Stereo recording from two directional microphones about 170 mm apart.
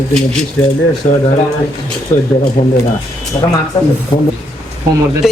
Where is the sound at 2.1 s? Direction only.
15° left (ahead or behind).